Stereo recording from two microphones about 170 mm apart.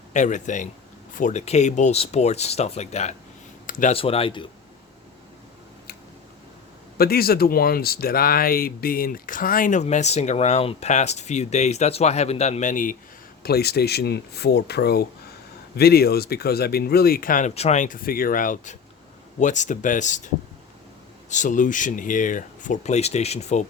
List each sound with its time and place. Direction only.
0.1 s speech: 45° left (ahead or behind)
3.7 s a sound: 50° left (ahead or behind)
3.9 s speech: 35° left (ahead or behind)
7.0 s speech: 65° left (ahead or behind)
13.4 s speech: 70° left (ahead or behind); by 23.6 s 40° left (ahead or behind)